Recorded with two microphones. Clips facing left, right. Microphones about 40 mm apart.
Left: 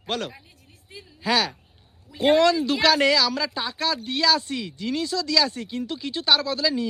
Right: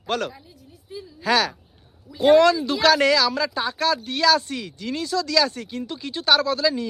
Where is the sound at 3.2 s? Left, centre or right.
Right.